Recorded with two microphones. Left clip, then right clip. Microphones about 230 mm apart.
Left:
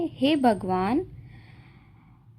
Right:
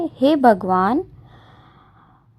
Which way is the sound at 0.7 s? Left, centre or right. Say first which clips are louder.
Right 8 dB; centre.